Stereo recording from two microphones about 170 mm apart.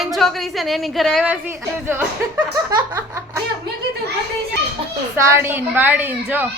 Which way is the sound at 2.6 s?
20° right (ahead or behind).